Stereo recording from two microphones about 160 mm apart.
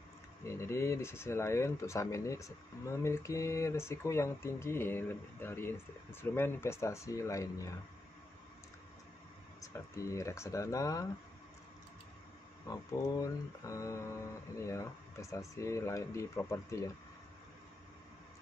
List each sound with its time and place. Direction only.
0.5 s speech: 15° left (ahead or behind)
9.6 s speech: 20° left (ahead or behind)
12.6 s speech: 20° left (ahead or behind)